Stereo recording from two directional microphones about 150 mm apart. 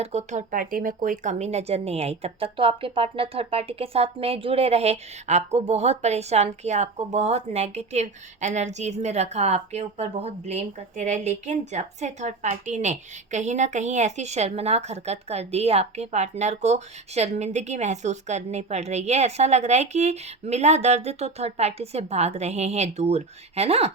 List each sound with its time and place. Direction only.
0.0 s speech: 45° right (ahead or behind)